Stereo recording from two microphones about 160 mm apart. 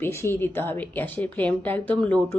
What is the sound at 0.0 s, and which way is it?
A woman's voice, 15° left (ahead or behind).